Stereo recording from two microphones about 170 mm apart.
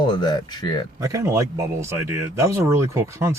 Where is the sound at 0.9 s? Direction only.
20° right (ahead or behind).